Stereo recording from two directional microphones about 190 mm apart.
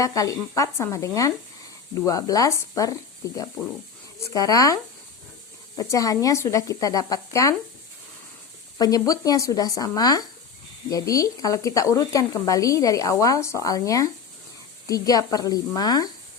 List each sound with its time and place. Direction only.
0.0 s speech: 15° left (ahead or behind)
4.2 s speech: 20° left (ahead or behind)
8.8 s speech: 20° left (ahead or behind)